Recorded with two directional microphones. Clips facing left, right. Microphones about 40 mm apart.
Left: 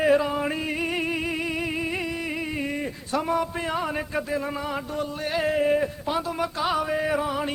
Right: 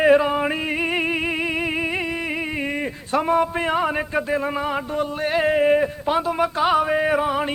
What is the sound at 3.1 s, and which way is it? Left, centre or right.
Music, right.